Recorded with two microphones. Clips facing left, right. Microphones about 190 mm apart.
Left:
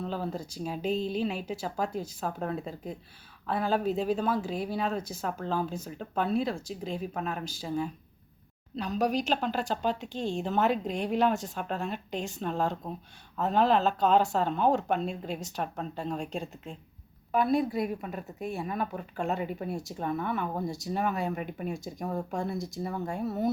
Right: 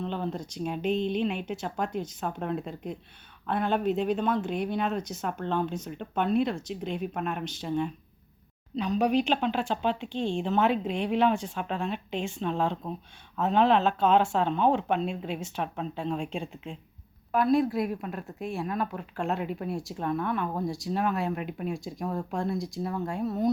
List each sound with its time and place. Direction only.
0.0 s speech: 5° left (ahead or behind)
10.0 s speech: 45° left (ahead or behind)
10.4 s speech: 5° left (ahead or behind)